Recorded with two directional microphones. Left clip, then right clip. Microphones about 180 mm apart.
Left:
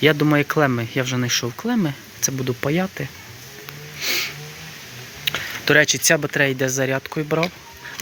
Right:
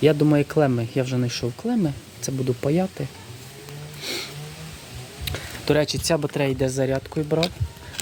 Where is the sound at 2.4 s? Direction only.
Centre (ahead or behind).